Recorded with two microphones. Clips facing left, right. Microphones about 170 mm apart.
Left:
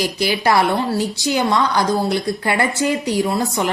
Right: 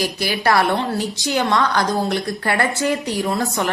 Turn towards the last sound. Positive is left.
turn(degrees=15)  # may be behind; listen again after turning